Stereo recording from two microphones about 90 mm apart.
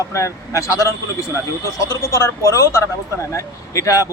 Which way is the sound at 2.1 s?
30° left (ahead or behind).